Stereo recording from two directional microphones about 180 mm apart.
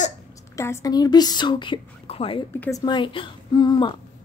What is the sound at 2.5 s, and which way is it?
Speech, 15° left (ahead or behind).